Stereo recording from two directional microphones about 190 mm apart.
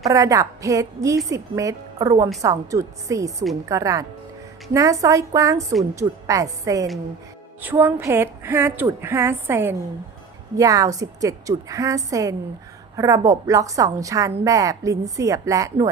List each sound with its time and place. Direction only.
0.1 s a woman's voice: 15° right (ahead or behind)